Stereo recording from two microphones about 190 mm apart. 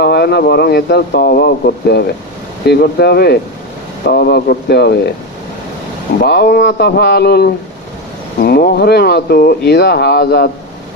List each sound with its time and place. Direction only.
0.0 s speech: 60° left (ahead or behind)
6.2 s speech: 60° left (ahead or behind)